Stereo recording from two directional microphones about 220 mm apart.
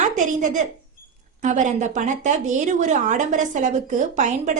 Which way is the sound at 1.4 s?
35° right (ahead or behind).